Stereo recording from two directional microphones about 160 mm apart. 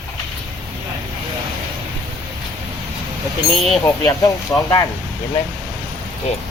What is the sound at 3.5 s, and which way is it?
Speech, centre (ahead or behind).